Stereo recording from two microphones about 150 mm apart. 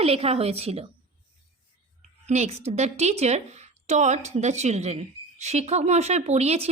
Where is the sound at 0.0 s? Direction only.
40° right (ahead or behind).